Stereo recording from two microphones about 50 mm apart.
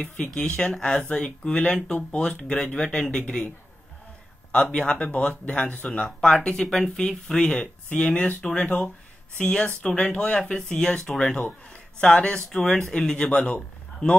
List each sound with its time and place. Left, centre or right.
0.2 s speech: centre
4.5 s speech: centre
6.2 s speech: centre
8.6 s speech: left
9.4 s a man's voice: centre